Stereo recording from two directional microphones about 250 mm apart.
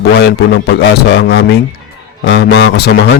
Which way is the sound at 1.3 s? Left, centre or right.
Left.